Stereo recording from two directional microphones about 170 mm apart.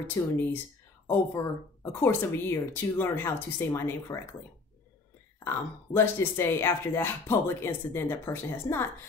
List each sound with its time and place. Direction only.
0.2 s speech: 20° left (ahead or behind)
5.4 s speech: 15° left (ahead or behind)